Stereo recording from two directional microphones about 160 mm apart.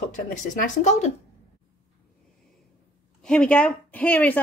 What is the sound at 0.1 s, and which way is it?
Speech, 55° left (ahead or behind).